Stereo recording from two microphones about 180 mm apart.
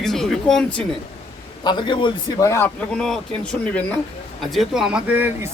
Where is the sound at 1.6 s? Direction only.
25° left (ahead or behind).